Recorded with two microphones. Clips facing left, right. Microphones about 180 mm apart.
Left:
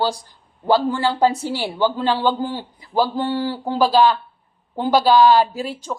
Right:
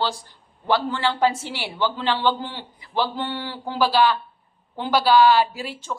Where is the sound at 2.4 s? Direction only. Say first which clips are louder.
Left 8 dB; 40° left (ahead or behind).